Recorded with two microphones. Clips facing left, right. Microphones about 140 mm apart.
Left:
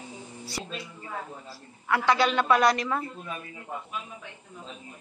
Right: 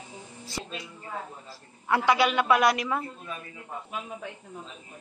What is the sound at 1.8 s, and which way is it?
A woman's voice, 15° right (ahead or behind).